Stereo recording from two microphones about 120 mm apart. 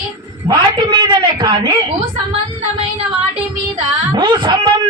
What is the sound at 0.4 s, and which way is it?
A man's voice, 40° right (ahead or behind).